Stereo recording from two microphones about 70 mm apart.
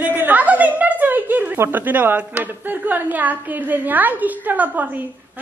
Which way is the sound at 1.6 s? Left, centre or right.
Right.